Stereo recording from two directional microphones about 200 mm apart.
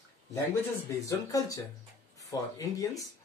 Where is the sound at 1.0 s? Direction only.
15° left (ahead or behind).